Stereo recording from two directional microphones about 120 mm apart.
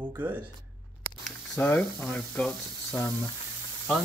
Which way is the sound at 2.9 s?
30° left (ahead or behind).